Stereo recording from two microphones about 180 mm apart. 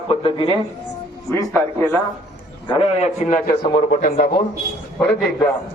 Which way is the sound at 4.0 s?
55° left (ahead or behind).